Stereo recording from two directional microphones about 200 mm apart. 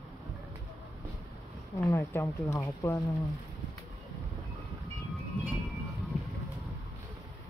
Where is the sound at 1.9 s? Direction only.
15° left (ahead or behind).